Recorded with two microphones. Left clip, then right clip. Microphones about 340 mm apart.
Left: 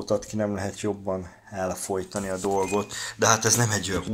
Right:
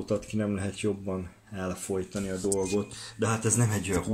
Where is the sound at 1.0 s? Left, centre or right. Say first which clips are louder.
Left 6 dB; left.